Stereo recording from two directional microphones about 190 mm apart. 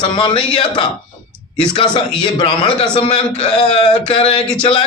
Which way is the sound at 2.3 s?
25° left (ahead or behind).